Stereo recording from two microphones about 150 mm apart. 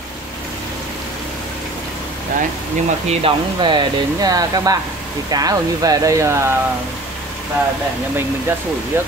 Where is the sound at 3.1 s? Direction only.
35° right (ahead or behind); by 6.5 s 20° right (ahead or behind).